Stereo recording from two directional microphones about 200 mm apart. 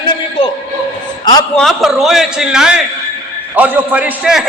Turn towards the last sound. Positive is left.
turn(degrees=-5)  # may be behind; listen again after turning